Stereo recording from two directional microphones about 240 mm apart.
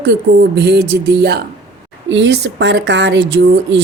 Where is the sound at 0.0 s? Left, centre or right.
Right.